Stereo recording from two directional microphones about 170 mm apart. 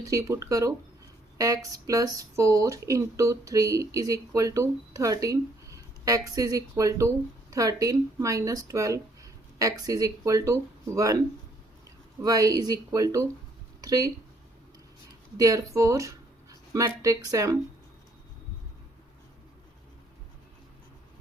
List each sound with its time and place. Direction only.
0.0 s speech: 20° right (ahead or behind)
12.2 s speech: 20° right (ahead or behind)
15.4 s speech: 20° right (ahead or behind)